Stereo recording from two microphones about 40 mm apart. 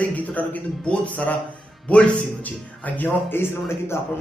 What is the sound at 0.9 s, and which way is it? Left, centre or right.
Speech, left.